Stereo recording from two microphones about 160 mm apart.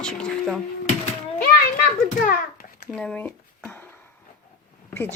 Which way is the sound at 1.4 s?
65° left (ahead or behind).